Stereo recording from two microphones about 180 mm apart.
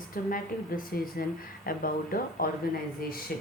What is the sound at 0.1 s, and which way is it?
Speech, 50° left (ahead or behind).